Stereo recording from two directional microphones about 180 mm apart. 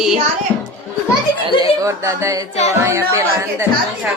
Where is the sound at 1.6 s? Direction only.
20° right (ahead or behind).